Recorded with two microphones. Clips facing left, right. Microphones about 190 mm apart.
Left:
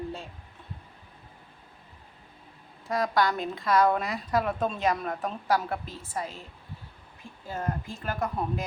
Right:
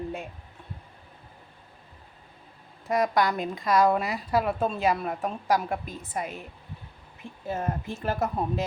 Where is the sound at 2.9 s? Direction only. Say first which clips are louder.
Right 2 dB; 20° right (ahead or behind).